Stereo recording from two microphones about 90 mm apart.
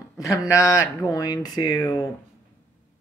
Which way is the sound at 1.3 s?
50° left (ahead or behind).